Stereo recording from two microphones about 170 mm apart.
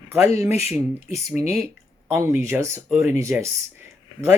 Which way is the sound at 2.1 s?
15° right (ahead or behind).